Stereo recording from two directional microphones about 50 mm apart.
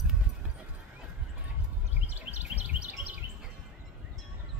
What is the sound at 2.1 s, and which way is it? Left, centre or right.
Bird, right.